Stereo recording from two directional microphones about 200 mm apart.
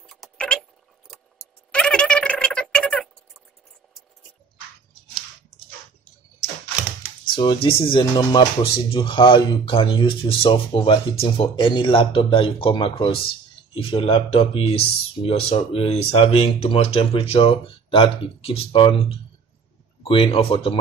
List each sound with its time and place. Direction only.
0.0 s keys jangling: centre (ahead or behind)
1.7 s a sound: 5° left (ahead or behind)
7.2 s music: 25° left (ahead or behind)
7.6 s speech: 25° left (ahead or behind)